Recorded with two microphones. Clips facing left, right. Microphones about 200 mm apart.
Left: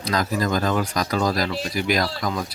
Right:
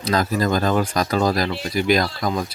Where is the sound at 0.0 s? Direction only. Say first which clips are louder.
Right 3 dB; 30° right (ahead or behind).